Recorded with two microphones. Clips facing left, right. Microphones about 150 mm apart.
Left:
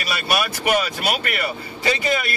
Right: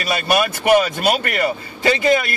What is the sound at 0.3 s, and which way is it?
Speech, 35° right (ahead or behind).